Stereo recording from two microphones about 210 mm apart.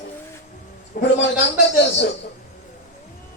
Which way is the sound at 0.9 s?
45° left (ahead or behind).